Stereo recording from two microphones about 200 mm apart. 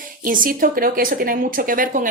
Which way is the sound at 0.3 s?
45° right (ahead or behind).